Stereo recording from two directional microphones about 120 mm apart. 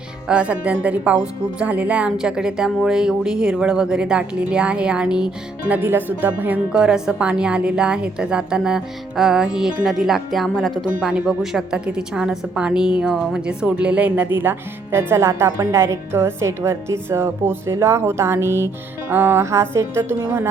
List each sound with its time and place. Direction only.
0.3 s speech: 10° right (ahead or behind)